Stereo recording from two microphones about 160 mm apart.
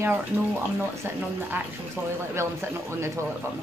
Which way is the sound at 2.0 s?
15° right (ahead or behind).